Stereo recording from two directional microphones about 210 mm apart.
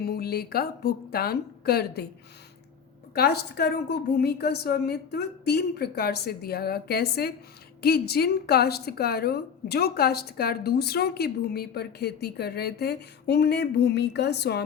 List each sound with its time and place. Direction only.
0.0 s a woman's voice: 50° left (ahead or behind)
3.2 s a woman's voice: 50° left (ahead or behind)